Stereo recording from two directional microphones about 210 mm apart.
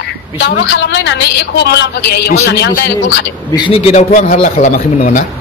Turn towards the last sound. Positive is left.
turn(degrees=40)  # may be behind; listen again after turning